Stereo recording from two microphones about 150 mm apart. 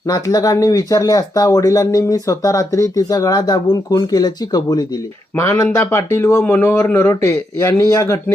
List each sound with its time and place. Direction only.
0.1 s speech: 25° left (ahead or behind)